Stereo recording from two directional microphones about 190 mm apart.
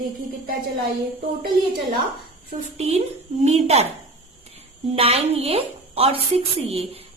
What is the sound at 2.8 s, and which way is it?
A woman's voice, 35° right (ahead or behind).